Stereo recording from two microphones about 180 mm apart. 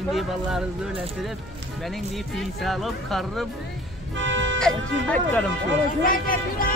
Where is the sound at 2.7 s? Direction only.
Centre (ahead or behind).